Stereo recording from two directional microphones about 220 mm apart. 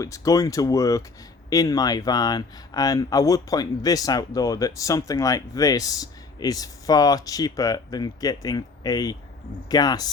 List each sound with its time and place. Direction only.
0.0 s speech: 15° left (ahead or behind)